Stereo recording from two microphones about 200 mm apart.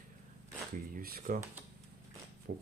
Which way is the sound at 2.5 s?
50° right (ahead or behind).